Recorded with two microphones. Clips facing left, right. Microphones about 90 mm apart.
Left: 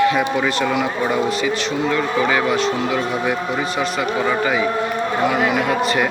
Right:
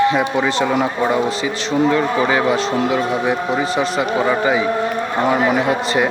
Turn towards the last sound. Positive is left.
turn(degrees=-25)  # may be behind; listen again after turning